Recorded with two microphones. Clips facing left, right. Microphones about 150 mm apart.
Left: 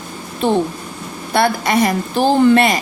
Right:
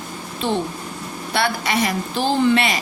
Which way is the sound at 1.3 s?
45° left (ahead or behind).